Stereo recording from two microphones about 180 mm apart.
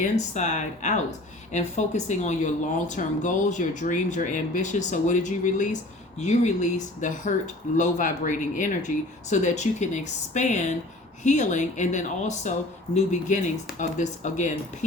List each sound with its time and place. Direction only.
0.0 s speech: 40° left (ahead or behind)